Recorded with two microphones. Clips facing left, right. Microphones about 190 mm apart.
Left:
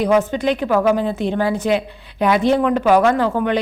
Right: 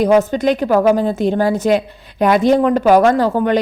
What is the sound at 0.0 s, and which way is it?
A woman's voice, 40° right (ahead or behind).